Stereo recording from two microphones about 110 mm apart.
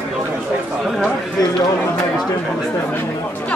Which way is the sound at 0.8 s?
5° right (ahead or behind).